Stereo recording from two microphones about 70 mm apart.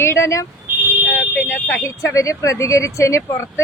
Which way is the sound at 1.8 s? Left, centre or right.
Left.